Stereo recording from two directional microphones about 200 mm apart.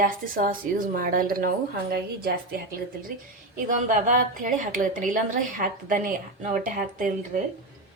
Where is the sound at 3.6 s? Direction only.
40° right (ahead or behind).